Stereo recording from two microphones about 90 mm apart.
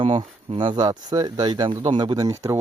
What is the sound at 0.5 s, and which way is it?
Speech, 55° right (ahead or behind).